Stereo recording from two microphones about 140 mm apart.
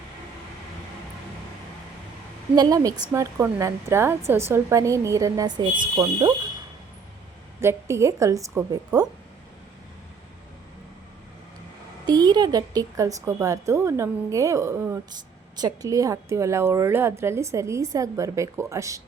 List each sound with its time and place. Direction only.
2.6 s a woman's voice: 25° right (ahead or behind)
7.6 s a woman's voice: 20° right (ahead or behind)
12.0 s a woman's voice: 30° right (ahead or behind)